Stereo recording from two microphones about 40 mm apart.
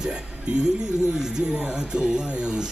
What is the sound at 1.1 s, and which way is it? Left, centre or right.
Speech, centre.